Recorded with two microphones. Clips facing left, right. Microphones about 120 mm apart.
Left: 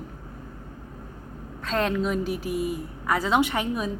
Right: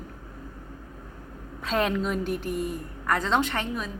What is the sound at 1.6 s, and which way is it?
A woman's voice, 5° right (ahead or behind).